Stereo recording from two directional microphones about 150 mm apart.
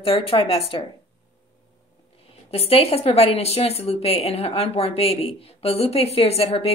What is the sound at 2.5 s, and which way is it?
A woman's voice, 40° left (ahead or behind).